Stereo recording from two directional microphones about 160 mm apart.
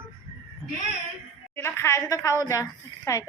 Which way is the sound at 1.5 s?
15° left (ahead or behind).